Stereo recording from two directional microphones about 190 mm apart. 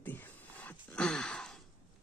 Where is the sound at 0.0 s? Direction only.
10° left (ahead or behind).